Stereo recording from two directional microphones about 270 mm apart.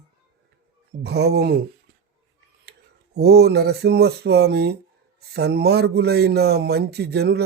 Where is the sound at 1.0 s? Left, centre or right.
Right.